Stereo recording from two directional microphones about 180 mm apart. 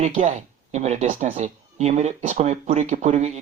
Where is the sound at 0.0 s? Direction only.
45° right (ahead or behind).